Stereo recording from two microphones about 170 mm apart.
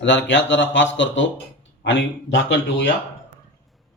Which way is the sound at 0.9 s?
90° left.